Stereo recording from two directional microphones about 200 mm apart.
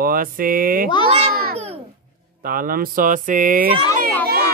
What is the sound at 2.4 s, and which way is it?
Speech, 45° right (ahead or behind).